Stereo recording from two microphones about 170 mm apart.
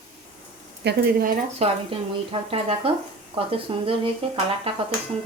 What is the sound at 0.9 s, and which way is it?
Speech, 60° right (ahead or behind).